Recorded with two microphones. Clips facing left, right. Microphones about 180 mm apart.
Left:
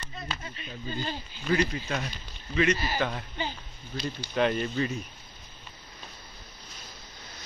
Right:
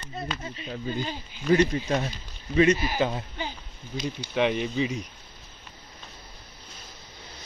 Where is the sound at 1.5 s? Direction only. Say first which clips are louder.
Right 6 dB; 35° right (ahead or behind); by 4.9 s 5° right (ahead or behind).